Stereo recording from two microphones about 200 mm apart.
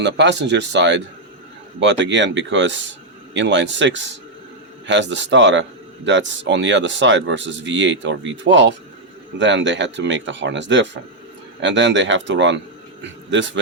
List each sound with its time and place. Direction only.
0.0 s speech: 60° right (ahead or behind)